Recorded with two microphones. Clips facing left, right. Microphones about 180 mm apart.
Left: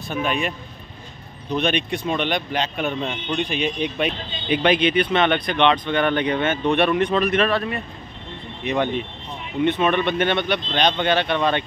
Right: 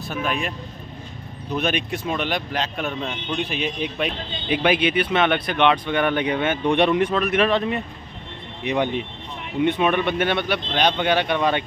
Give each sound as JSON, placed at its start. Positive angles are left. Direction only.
{"t": 0.0, "sound": "speech", "side_deg": 0}
{"t": 7.1, "sound": "speech", "side_deg": -5}
{"t": 7.4, "sound": "speech", "side_deg": -20}